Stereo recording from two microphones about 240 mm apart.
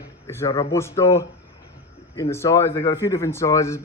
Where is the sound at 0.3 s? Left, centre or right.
Centre.